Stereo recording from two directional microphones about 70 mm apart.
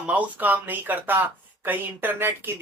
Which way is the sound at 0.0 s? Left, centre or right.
Right.